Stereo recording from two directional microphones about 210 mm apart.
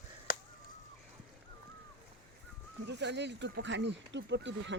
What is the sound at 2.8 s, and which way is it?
Speech, 55° right (ahead or behind).